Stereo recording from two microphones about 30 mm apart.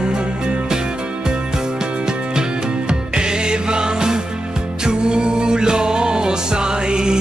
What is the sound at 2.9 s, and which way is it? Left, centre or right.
Music, right.